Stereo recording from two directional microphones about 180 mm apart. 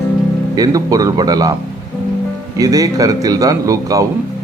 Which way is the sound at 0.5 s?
20° right (ahead or behind).